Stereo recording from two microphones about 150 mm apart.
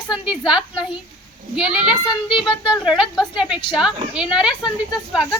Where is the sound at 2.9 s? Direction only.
5° right (ahead or behind).